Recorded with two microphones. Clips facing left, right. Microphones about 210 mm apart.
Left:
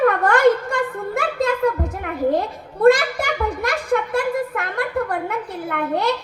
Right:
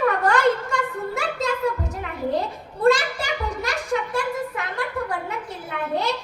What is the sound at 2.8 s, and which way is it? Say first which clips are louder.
A child's voice: left 5 dB; 55° left (ahead or behind).